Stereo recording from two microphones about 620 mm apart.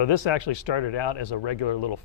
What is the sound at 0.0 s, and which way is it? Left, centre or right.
Speech, left.